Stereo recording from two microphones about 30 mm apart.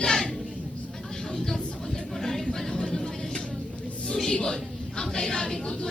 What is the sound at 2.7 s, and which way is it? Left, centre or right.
Vehicle, left.